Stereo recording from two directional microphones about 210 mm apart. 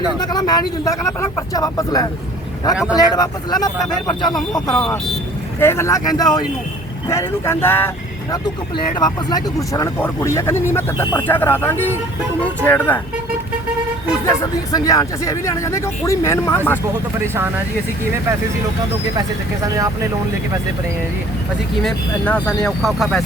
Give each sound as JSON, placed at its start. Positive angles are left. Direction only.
{"t": 0.2, "sound": "speech", "side_deg": 20}
{"t": 4.7, "sound": "speech", "side_deg": 5}
{"t": 9.0, "sound": "speech", "side_deg": 20}
{"t": 14.3, "sound": "speech", "side_deg": 15}
{"t": 17.2, "sound": "speech", "side_deg": -10}
{"t": 19.6, "sound": "speech", "side_deg": -15}
{"t": 21.8, "sound": "speech", "side_deg": 5}